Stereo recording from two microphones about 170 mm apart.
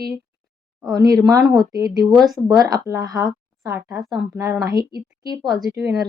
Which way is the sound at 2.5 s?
20° right (ahead or behind).